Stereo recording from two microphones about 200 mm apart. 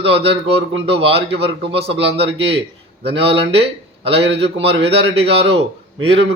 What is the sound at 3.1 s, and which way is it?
A man's voice, 30° right (ahead or behind).